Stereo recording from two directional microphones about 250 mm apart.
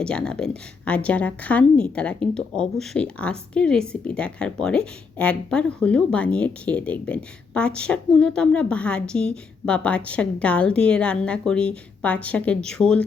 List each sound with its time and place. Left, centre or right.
0.0 s a woman's voice: centre